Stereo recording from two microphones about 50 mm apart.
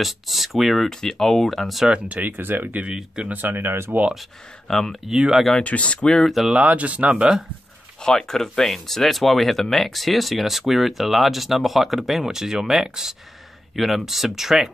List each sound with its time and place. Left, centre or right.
0.0 s speech: centre
1.9 s speech: right
2.9 s speech: centre
3.3 s speech: right
4.6 s speech: centre
5.0 s speech: centre
5.6 s speech: left
5.9 s speech: centre
6.5 s speech: right
8.0 s speech: centre